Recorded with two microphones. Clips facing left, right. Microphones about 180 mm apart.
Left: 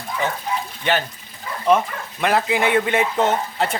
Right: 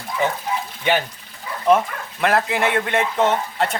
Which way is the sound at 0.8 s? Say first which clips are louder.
Right 2 dB; 10° right (ahead or behind).